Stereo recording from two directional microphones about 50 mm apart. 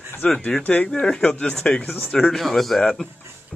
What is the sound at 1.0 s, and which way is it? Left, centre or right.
Speech, centre.